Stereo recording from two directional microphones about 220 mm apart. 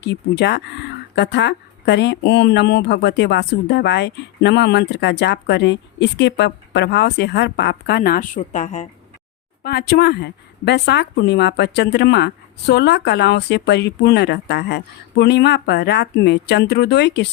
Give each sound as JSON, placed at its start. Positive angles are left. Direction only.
{"t": 0.0, "sound": "speech", "side_deg": 50}
{"t": 9.6, "sound": "speech", "side_deg": 45}